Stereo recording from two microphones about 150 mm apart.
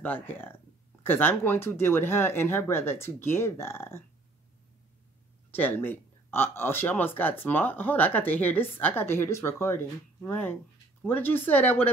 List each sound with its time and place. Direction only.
0.0 s speech: 15° left (ahead or behind)
5.5 s speech: 15° left (ahead or behind)